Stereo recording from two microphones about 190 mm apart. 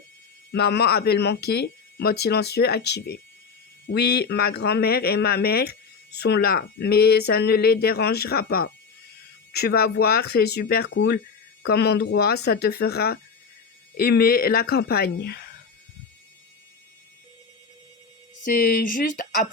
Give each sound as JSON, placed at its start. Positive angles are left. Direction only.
{"t": 0.5, "sound": "speech", "side_deg": 60}
{"t": 18.4, "sound": "speech", "side_deg": 50}